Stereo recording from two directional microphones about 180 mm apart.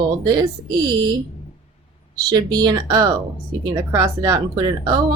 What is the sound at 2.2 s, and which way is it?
A woman's voice, 20° right (ahead or behind).